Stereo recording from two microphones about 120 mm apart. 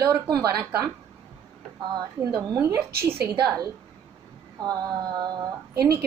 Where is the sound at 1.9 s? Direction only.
30° right (ahead or behind).